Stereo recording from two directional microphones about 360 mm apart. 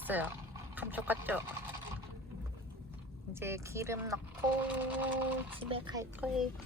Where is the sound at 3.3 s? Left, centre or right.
Centre.